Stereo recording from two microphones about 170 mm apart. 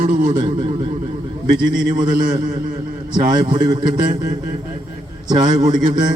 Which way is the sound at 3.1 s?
25° right (ahead or behind).